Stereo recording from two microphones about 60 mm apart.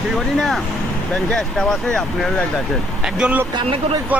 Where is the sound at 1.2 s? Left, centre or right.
Centre.